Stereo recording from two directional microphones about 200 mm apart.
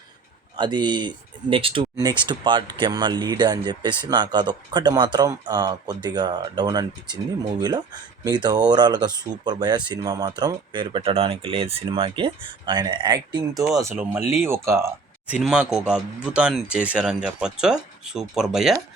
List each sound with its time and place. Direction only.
0.5 s speech: 20° right (ahead or behind)
8.2 s speech: 20° right (ahead or behind)
15.4 s speech: centre (ahead or behind)